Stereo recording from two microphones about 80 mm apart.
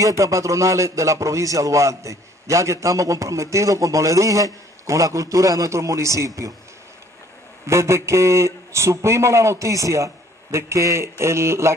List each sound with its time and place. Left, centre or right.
0.0 s a man's voice: right
7.6 s a man's voice: right